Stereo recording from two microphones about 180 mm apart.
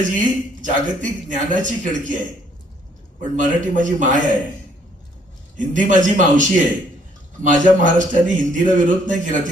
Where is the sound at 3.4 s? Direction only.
45° right (ahead or behind).